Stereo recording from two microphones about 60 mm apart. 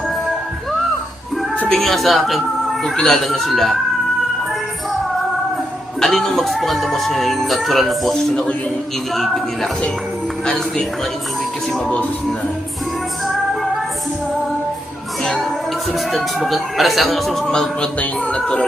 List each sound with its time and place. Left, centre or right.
1.6 s speech: centre
2.9 s music: centre
6.0 s music: centre
15.2 s music: centre
17.4 s music: centre
18.0 s speech: centre